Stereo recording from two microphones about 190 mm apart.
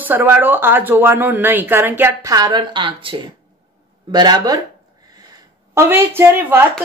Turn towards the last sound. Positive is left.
turn(degrees=-10)  # may be behind; listen again after turning